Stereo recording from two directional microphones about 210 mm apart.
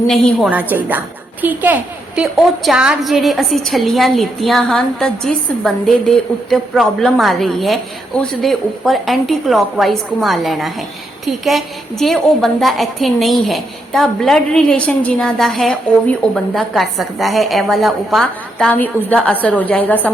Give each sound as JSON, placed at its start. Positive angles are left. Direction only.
{"t": 0.1, "sound": "a woman's voice", "side_deg": 0}